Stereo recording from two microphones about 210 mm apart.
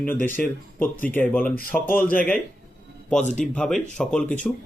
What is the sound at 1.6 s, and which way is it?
Speech, 45° left (ahead or behind).